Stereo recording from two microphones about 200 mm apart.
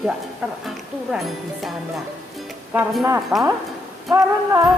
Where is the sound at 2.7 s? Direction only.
Centre (ahead or behind).